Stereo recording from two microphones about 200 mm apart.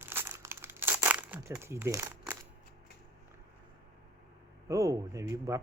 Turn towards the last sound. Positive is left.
turn(degrees=-15)  # may be behind; listen again after turning